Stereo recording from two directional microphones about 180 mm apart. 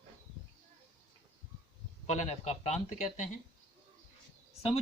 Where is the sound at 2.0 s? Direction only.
40° left (ahead or behind).